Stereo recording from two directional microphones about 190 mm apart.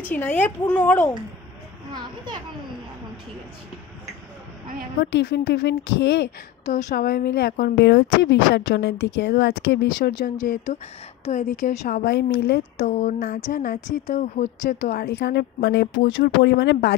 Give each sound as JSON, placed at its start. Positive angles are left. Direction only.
{"t": 0.0, "sound": "a woman's voice", "side_deg": 10}
{"t": 1.9, "sound": "a child's voice", "side_deg": -25}
{"t": 5.0, "sound": "a woman's voice", "side_deg": 60}
{"t": 6.6, "sound": "a woman's voice", "side_deg": 40}
{"t": 6.9, "sound": "a woman's voice", "side_deg": 55}
{"t": 10.4, "sound": "a woman's voice", "side_deg": 40}
{"t": 12.0, "sound": "a woman's voice", "side_deg": 60}
{"t": 12.7, "sound": "a sound", "side_deg": 40}
{"t": 14.0, "sound": "a woman's voice", "side_deg": 40}